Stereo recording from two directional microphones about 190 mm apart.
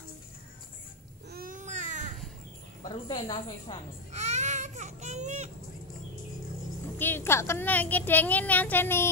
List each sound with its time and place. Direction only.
1.3 s baby cry: 45° right (ahead or behind)
2.8 s a woman's voice: 25° left (ahead or behind)
4.1 s baby cry: 35° right (ahead or behind)
7.0 s a child's voice: 10° left (ahead or behind)